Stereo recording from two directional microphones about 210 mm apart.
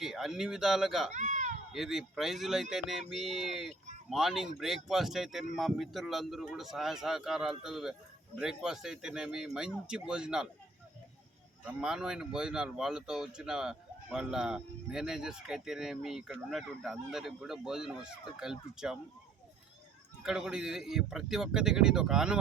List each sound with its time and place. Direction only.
0.0 s speech: centre (ahead or behind)
1.1 s a sound: 35° right (ahead or behind)
1.7 s speech: centre (ahead or behind)
11.6 s speech: 5° right (ahead or behind)
20.2 s speech: 5° right (ahead or behind)